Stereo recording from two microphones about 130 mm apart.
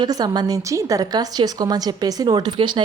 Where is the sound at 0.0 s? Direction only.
30° right (ahead or behind).